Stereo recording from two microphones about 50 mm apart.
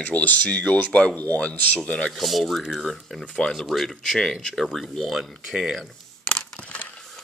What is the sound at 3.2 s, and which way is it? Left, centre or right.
Speech, centre.